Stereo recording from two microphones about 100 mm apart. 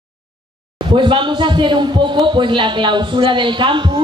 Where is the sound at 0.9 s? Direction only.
55° right (ahead or behind).